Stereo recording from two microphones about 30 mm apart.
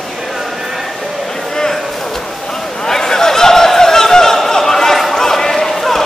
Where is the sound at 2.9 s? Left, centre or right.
Centre.